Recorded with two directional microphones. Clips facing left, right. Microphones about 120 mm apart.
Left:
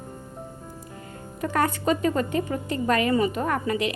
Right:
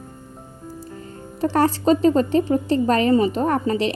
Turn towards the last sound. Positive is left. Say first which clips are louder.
# right 5 dB
turn(degrees=-30)  # may be behind; listen again after turning